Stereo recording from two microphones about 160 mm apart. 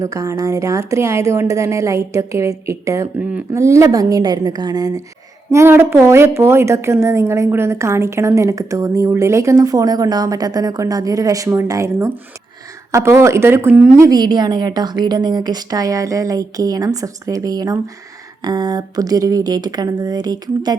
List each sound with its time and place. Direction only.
0.0 s a woman's voice: 20° right (ahead or behind)
14.1 s a woman's voice: 25° right (ahead or behind)